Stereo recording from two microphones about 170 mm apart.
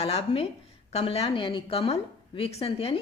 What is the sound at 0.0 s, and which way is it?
A woman's voice, 35° left (ahead or behind).